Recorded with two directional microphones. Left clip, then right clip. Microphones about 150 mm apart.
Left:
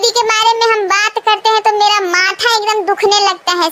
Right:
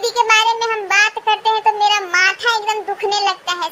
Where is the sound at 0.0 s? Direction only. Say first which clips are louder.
Left 2 dB; 45° left (ahead or behind).